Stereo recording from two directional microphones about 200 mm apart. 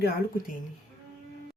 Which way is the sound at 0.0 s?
50° left (ahead or behind).